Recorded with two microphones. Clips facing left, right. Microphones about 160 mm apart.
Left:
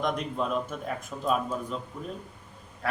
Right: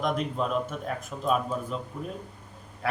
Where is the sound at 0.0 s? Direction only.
Centre (ahead or behind).